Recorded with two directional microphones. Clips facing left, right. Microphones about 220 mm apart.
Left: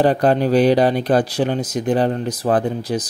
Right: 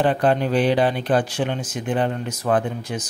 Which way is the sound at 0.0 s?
40° left (ahead or behind).